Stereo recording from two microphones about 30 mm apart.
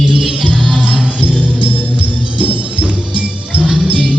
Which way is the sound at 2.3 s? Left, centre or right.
Right.